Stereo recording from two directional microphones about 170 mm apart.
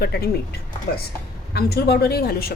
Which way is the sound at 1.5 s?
70° left (ahead or behind).